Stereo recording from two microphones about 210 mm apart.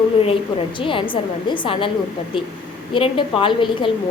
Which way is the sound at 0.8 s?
25° left (ahead or behind).